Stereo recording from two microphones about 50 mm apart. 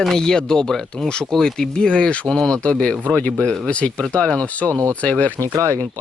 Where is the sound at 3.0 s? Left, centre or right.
Left.